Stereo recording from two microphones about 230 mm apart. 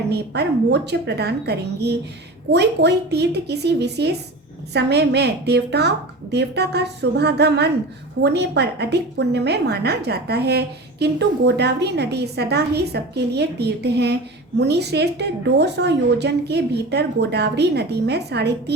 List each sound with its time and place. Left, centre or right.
0.1 s a woman's voice: right